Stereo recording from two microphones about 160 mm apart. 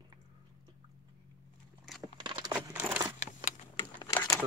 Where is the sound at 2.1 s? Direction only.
30° right (ahead or behind).